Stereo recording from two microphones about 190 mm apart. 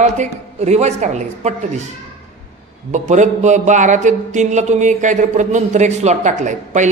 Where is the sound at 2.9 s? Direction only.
40° right (ahead or behind).